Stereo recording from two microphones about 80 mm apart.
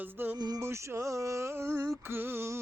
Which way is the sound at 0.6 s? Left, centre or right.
Right.